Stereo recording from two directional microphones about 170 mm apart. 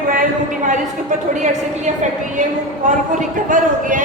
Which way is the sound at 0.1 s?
50° right (ahead or behind).